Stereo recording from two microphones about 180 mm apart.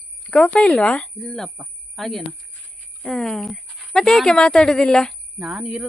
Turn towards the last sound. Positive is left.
turn(degrees=0)  # may be behind; listen again after turning